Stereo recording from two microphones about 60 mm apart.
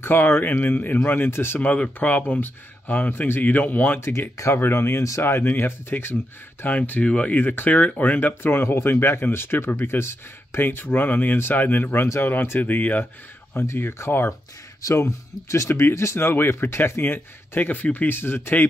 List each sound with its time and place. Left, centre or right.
0.0 s speech: left
1.6 s speech: left
4.0 s speech: left
6.6 s speech: left
8.4 s speech: left
10.6 s speech: left
13.5 s speech: left
14.8 s speech: left